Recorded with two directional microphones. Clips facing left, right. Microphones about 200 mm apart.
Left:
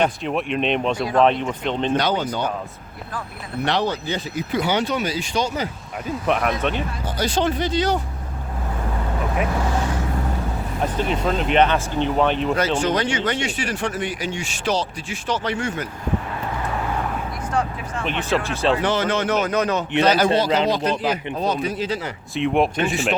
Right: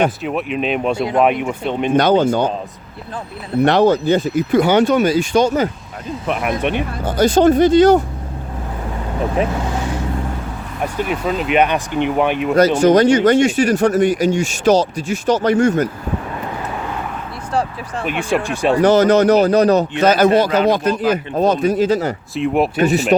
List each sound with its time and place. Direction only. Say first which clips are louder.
0.2 s speech: right 2 dB; 5° right (ahead or behind)
2.0 s speech: right 9 dB; 50° right (ahead or behind)
3.6 s speech: right 10 dB; 50° right (ahead or behind)
6.2 s speech: even; centre (ahead or behind)
6.7 s speech: right 8 dB; 50° right (ahead or behind)
10.8 s speech: right 2 dB; 10° right (ahead or behind)
12.5 s speech: right 9 dB; 40° right (ahead or behind)
17.5 s vehicle: right 4 dB; 35° right (ahead or behind)
18.0 s speech: right 4 dB; 10° right (ahead or behind)
18.8 s a man's voice: right 10 dB; 40° right (ahead or behind)
20.0 s speech: right 2 dB; 50° right (ahead or behind)
22.4 s speech: right 2 dB; 5° right (ahead or behind)
22.8 s a man's voice: right 7 dB; 40° right (ahead or behind)